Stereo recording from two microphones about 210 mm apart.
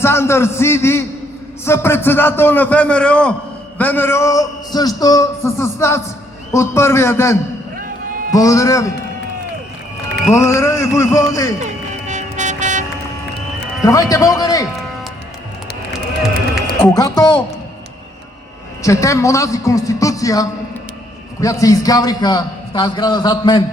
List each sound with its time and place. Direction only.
0.0 s a man's voice: 10° left (ahead or behind)
10.3 s a man's voice: 15° left (ahead or behind)
12.0 s vehicle: 35° right (ahead or behind)
13.8 s a man's voice: 15° left (ahead or behind)
15.9 s run: centre (ahead or behind)
16.8 s a man's voice: 20° left (ahead or behind)
18.8 s a man's voice: 15° left (ahead or behind)